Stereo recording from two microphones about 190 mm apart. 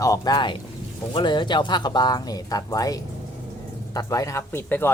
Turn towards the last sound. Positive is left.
turn(degrees=10)  # may be behind; listen again after turning